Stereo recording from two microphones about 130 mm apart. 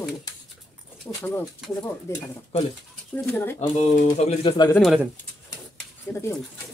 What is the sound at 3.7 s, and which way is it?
Speech, 55° left (ahead or behind).